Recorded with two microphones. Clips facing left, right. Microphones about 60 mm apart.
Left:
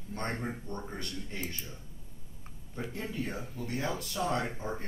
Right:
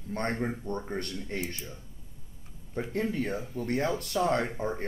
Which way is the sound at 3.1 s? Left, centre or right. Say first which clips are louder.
Right 5 dB; right.